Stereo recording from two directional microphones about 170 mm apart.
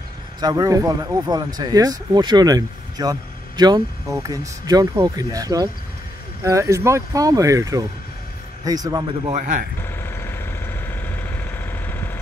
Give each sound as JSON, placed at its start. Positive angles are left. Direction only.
{"t": 0.4, "sound": "speech", "side_deg": -20}
{"t": 9.3, "sound": "speech", "side_deg": -50}
{"t": 9.8, "sound": "vehicle", "side_deg": 15}